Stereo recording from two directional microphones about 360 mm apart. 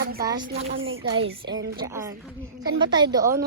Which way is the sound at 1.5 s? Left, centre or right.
Right.